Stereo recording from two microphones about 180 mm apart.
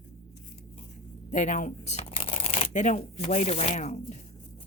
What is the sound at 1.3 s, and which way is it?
Speech, 40° left (ahead or behind).